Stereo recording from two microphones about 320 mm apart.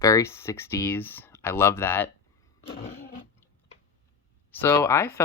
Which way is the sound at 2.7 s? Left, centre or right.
Left.